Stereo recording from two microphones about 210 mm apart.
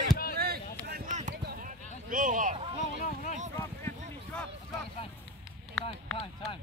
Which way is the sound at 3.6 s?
10° left (ahead or behind).